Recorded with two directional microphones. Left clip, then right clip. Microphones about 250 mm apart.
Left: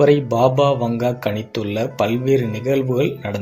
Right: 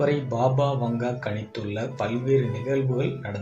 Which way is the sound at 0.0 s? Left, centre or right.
Left.